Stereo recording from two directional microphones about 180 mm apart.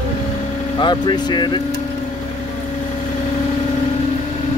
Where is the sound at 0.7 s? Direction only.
25° left (ahead or behind).